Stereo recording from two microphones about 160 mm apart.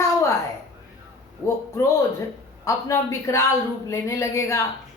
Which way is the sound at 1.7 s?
20° left (ahead or behind).